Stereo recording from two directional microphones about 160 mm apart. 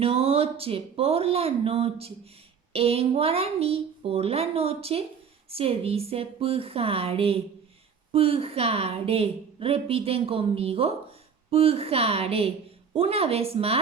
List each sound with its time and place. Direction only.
0.0 s a woman's voice: 35° right (ahead or behind)